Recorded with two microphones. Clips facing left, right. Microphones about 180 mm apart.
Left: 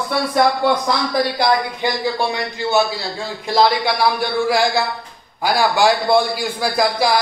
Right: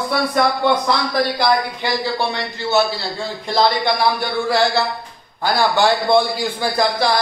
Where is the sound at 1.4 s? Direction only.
15° left (ahead or behind).